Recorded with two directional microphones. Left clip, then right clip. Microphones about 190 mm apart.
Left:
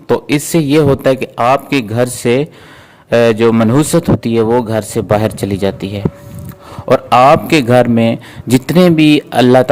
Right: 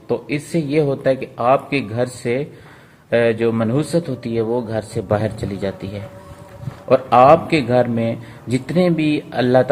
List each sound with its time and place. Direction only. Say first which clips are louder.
0.1 s a man's voice: left 9 dB; 40° left (ahead or behind)